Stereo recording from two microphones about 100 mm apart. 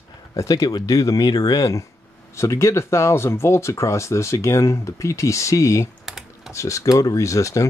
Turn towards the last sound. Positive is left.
turn(degrees=30)  # may be behind; listen again after turning